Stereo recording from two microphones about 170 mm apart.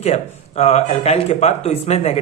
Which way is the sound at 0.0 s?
40° left (ahead or behind).